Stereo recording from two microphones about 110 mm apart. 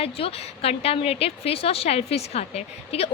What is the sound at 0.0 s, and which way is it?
A woman's voice, 60° left (ahead or behind).